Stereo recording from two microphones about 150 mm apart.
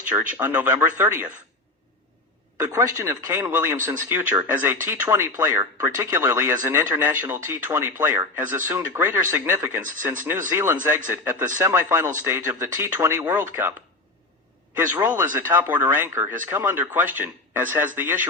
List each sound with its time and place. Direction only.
0.0 s speech: 10° right (ahead or behind)
2.6 s speech: 20° right (ahead or behind)
14.8 s speech: 20° right (ahead or behind)